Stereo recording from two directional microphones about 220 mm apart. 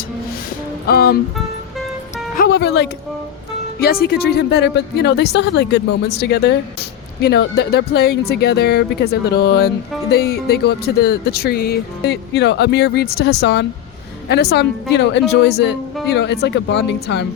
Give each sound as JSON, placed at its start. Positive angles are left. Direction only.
{"t": 0.9, "sound": "speech", "side_deg": 45}
{"t": 2.3, "sound": "music", "side_deg": 45}
{"t": 3.8, "sound": "speech", "side_deg": 45}